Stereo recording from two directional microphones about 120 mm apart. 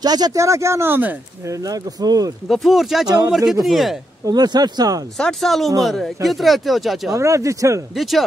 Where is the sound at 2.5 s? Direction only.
Centre (ahead or behind).